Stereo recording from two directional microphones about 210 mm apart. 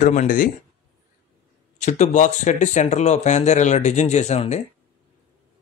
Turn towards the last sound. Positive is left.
turn(degrees=35)  # may be behind; listen again after turning